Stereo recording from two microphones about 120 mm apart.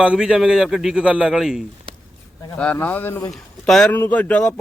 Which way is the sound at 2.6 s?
10° left (ahead or behind).